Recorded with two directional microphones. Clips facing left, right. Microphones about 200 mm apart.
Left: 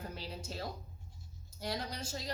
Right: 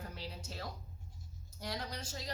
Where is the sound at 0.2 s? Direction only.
30° left (ahead or behind).